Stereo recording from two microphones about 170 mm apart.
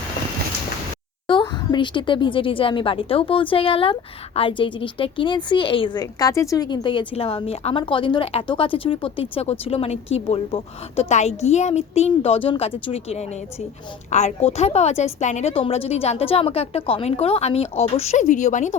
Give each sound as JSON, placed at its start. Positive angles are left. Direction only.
{"t": 1.3, "sound": "a woman's voice", "side_deg": 30}